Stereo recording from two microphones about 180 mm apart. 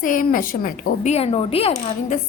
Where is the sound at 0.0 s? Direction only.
50° left (ahead or behind).